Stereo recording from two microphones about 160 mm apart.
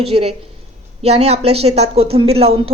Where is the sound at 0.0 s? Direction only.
35° right (ahead or behind).